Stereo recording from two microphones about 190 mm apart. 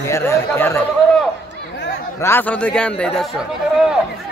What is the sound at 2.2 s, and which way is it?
A man's voice, 10° left (ahead or behind).